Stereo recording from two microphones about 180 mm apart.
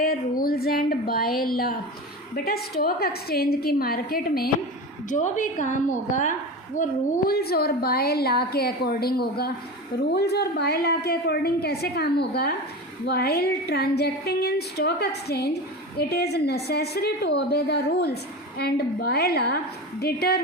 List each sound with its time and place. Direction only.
0.0 s a sound: 55° left (ahead or behind)
2.3 s a woman's voice: 55° left (ahead or behind)
5.0 s a woman's voice: 45° left (ahead or behind)
7.3 s a woman's voice: 60° left (ahead or behind)